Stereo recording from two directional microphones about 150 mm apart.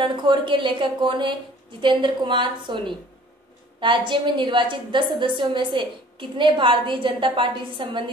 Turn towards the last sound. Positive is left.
turn(degrees=-35)  # may be behind; listen again after turning